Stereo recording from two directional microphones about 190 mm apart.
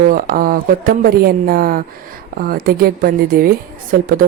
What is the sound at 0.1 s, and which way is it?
Speech, 50° right (ahead or behind).